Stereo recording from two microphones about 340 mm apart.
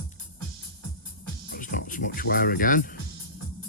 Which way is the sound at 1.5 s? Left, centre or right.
Left.